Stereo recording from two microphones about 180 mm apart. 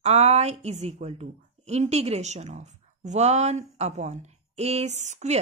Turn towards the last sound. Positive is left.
turn(degrees=-40)  # may be behind; listen again after turning